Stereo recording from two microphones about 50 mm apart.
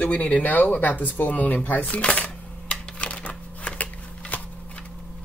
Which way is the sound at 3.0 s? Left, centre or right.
Left.